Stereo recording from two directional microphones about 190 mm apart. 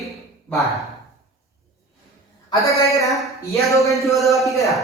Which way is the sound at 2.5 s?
15° left (ahead or behind).